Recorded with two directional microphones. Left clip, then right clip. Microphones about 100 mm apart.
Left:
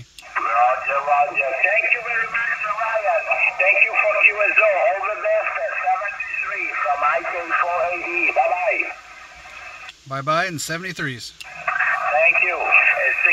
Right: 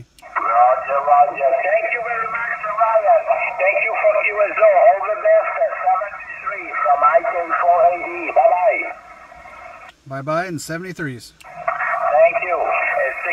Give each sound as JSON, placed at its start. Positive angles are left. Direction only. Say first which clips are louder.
{"t": 0.4, "sound": "radio", "louder": "right 4 dB", "side_deg": -30}
{"t": 10.1, "sound": "a sound", "louder": "left 1 dB", "side_deg": 0}
{"t": 11.6, "sound": "radio", "louder": "right 1 dB", "side_deg": -35}